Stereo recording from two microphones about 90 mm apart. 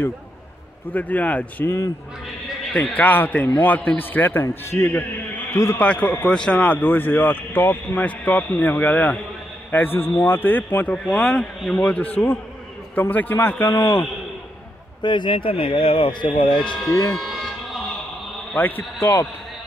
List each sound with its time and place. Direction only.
0.9 s speech: 15° left (ahead or behind)
2.7 s a man's voice: 20° left (ahead or behind)
5.8 s speech: 15° left (ahead or behind)
6.7 s a man's voice: 20° left (ahead or behind)
11.1 s a man's voice: 5° left (ahead or behind)
11.7 s a man's voice: 15° left (ahead or behind)
15.0 s speech: 60° left (ahead or behind)
17.1 s a sound: centre (ahead or behind)
18.6 s a man's voice: 25° left (ahead or behind)